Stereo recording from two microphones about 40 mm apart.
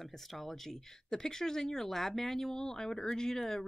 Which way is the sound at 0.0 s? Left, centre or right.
Centre.